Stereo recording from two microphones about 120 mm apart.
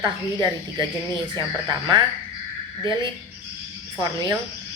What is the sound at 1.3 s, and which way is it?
Speech, 40° right (ahead or behind).